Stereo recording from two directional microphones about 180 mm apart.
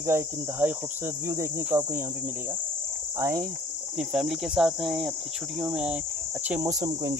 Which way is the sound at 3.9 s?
5° right (ahead or behind).